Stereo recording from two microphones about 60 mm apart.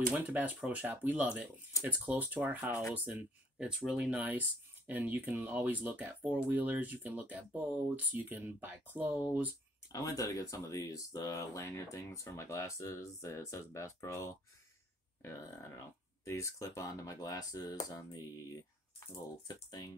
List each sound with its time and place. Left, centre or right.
0.1 s speech: right
3.5 s speech: centre
4.2 s speech: right
9.9 s speech: left
16.3 s speech: left